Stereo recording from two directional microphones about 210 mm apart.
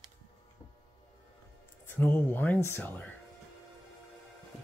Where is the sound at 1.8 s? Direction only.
10° left (ahead or behind).